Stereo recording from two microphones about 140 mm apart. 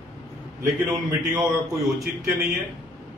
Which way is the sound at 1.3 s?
20° right (ahead or behind).